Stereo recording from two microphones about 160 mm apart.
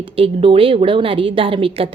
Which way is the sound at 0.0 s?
35° right (ahead or behind).